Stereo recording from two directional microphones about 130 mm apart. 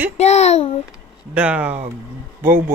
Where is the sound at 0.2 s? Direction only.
60° left (ahead or behind).